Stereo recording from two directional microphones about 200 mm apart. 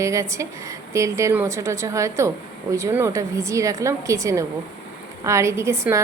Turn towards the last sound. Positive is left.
turn(degrees=-15)  # may be behind; listen again after turning